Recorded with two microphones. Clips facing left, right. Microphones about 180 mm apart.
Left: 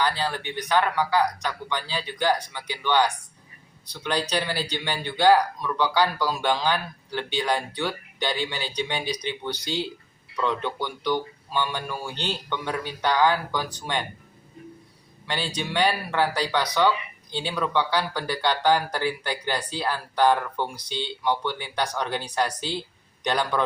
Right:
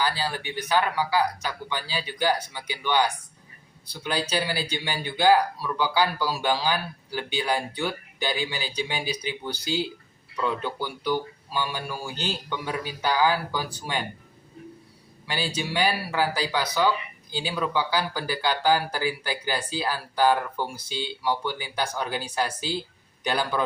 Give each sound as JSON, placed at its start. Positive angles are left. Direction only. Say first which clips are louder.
{"t": 0.0, "sound": "speech", "louder": "left 2 dB", "side_deg": -5}
{"t": 15.3, "sound": "speech", "louder": "even", "side_deg": -5}